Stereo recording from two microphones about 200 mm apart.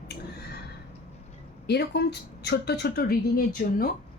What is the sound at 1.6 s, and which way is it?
Speech, 55° left (ahead or behind).